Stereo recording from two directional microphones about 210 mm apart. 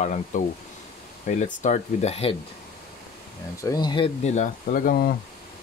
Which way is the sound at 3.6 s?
20° left (ahead or behind).